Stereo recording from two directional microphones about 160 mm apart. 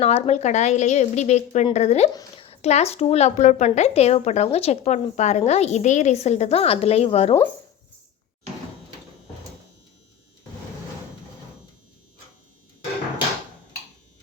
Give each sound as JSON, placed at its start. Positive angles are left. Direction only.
{"t": 0.0, "sound": "a woman's voice", "side_deg": 40}